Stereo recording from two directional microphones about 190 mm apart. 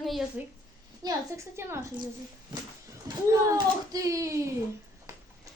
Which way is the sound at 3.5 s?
20° right (ahead or behind).